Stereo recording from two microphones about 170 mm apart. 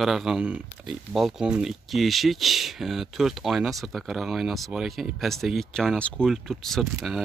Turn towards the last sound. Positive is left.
turn(degrees=0)  # may be behind; listen again after turning